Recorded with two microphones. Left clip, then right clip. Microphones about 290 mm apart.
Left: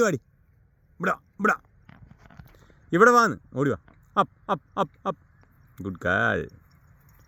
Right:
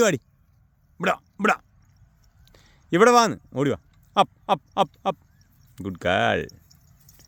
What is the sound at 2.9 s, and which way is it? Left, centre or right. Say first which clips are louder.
Speech: right 1 dB; centre.